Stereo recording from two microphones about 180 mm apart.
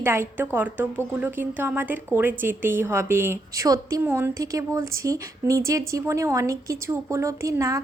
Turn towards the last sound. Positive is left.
turn(degrees=-20)  # may be behind; listen again after turning